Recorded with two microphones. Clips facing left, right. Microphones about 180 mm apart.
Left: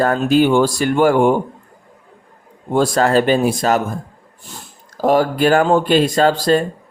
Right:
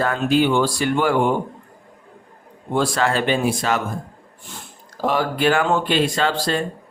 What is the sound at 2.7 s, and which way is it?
Speech, 40° left (ahead or behind).